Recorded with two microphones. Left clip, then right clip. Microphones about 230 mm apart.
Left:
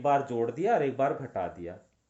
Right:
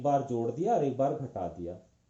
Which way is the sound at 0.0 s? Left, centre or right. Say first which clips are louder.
Left 2 dB; left.